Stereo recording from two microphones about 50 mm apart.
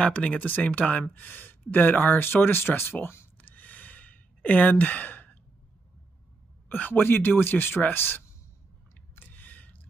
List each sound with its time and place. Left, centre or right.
0.0 s speech: left
6.7 s speech: left
9.1 s a sound: left